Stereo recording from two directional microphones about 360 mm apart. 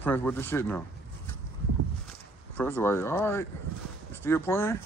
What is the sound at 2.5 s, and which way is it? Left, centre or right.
Speech, centre.